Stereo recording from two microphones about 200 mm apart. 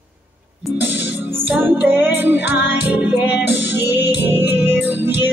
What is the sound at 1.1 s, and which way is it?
Music, 10° right (ahead or behind).